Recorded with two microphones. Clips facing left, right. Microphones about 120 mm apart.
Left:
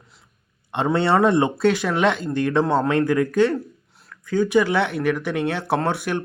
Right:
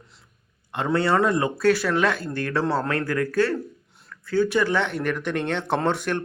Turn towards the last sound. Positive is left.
turn(degrees=10)  # may be behind; listen again after turning